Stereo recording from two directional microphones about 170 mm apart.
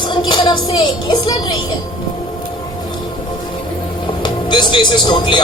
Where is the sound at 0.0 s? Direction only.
25° left (ahead or behind).